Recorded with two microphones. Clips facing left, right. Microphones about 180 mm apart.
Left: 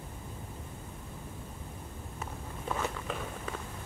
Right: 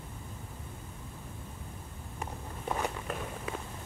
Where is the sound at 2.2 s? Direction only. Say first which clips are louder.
Right 2 dB; 15° right (ahead or behind).